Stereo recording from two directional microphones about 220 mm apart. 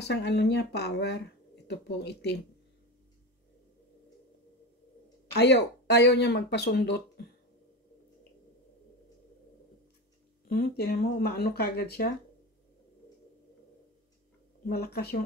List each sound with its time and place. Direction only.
0.0 s speech: 50° left (ahead or behind)
5.3 s speech: 50° left (ahead or behind)
10.5 s speech: 45° left (ahead or behind)
14.7 s speech: 45° left (ahead or behind)